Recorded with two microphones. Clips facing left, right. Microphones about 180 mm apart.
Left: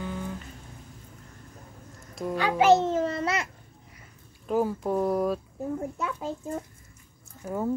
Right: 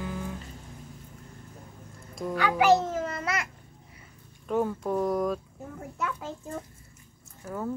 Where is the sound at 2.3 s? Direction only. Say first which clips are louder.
Left 2 dB; 25° left (ahead or behind).